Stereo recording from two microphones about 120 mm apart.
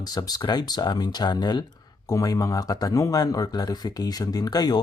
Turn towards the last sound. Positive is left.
turn(degrees=35)  # may be behind; listen again after turning